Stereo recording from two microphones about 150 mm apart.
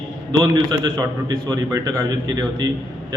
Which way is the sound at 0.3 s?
25° right (ahead or behind).